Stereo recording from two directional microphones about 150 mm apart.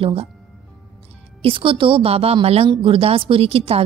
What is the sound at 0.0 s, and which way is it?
Speech, 40° right (ahead or behind).